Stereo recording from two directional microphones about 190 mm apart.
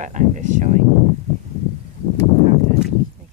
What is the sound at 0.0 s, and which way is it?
Speech, 40° right (ahead or behind).